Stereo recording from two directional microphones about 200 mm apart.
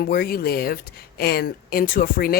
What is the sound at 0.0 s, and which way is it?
Speech, 50° left (ahead or behind).